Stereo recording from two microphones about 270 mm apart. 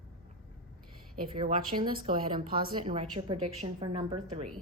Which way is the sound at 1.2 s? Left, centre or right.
Centre.